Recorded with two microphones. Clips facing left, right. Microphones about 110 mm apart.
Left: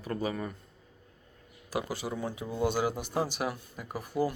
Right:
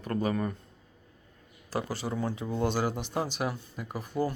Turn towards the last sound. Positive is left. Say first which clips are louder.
# even
turn(degrees=10)  # may be behind; listen again after turning